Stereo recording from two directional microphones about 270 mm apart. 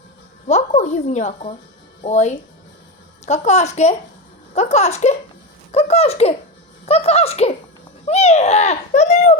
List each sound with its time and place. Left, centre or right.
0.4 s a woman's voice: left